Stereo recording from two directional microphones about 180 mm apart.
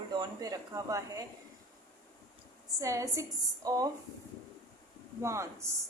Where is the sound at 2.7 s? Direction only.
15° right (ahead or behind).